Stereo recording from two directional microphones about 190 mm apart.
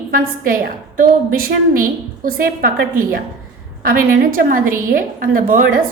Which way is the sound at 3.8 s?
50° right (ahead or behind).